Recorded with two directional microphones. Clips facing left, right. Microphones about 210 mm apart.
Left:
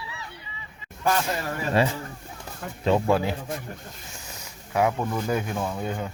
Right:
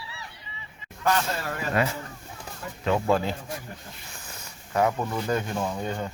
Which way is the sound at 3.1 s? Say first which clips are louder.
Left 1 dB; 10° left (ahead or behind).